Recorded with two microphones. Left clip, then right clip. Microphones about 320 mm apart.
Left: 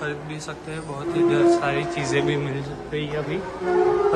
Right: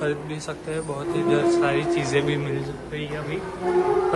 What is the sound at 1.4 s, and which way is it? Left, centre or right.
Speech, centre.